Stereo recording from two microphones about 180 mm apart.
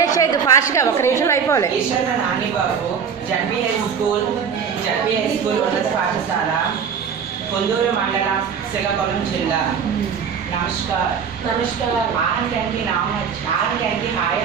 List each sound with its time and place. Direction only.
0.0 s a woman's voice: 20° left (ahead or behind)